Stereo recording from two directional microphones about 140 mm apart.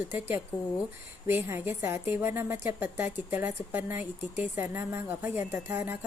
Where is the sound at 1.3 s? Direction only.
15° right (ahead or behind).